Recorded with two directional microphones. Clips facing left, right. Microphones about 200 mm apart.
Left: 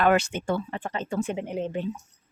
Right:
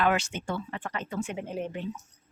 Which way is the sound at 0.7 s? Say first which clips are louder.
Left 4 dB; 30° left (ahead or behind).